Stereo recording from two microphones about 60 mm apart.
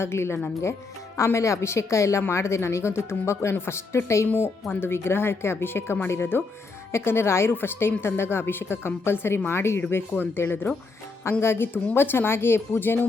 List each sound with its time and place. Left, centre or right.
0.0 s speech: left
4.3 s a woman's voice: left